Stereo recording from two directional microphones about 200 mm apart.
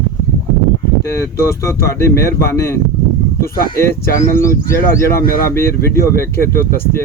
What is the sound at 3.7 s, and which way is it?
Speech, 15° left (ahead or behind).